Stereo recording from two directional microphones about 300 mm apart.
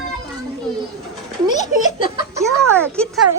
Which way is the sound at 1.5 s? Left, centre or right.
Left.